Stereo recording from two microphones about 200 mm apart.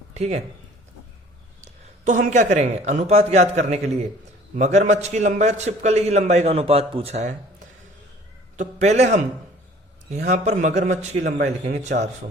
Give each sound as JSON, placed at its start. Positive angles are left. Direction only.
{"t": 0.1, "sound": "speech", "side_deg": -35}
{"t": 1.6, "sound": "a man's voice", "side_deg": -40}
{"t": 8.5, "sound": "a man's voice", "side_deg": -35}
{"t": 10.2, "sound": "a man's voice", "side_deg": -35}